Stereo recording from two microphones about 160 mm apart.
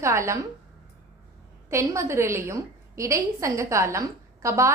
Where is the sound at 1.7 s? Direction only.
20° right (ahead or behind).